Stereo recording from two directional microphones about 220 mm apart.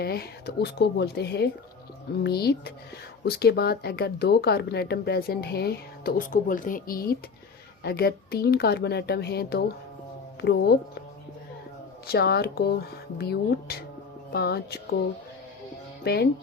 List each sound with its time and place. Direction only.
0.0 s speech: 45° left (ahead or behind)
12.0 s speech: 45° left (ahead or behind)
16.0 s speech: 45° left (ahead or behind)